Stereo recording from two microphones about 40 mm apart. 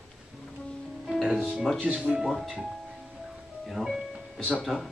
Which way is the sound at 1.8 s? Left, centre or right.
Right.